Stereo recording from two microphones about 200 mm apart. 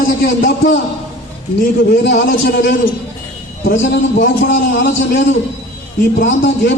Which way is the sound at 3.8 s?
70° left (ahead or behind).